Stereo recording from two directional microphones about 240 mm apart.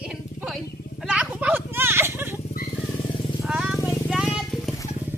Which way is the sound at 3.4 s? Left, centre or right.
Centre.